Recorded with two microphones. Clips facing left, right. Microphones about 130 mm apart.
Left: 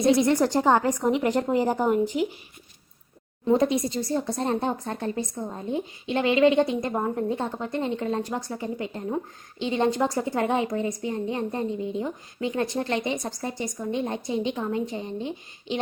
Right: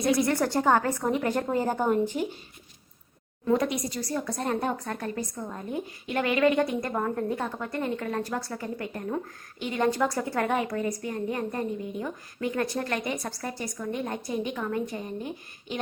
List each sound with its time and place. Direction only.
0.0 s a woman's voice: 20° left (ahead or behind)
3.4 s speech: 25° left (ahead or behind)